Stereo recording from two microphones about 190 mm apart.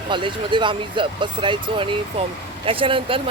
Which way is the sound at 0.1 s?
25° right (ahead or behind).